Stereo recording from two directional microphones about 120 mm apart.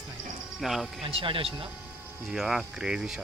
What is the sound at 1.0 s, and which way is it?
Speech, 45° right (ahead or behind).